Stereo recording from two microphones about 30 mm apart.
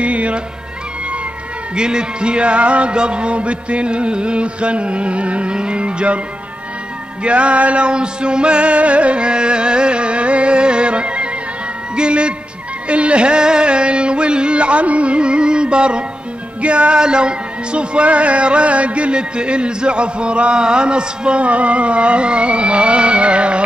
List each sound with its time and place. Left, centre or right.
0.0 s music: right
1.8 s music: right
7.2 s music: right
7.8 s music: right
11.9 s speech: right
12.8 s music: right
21.5 s music: right